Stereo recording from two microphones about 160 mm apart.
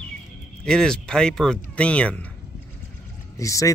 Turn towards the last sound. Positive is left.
turn(degrees=20)  # may be behind; listen again after turning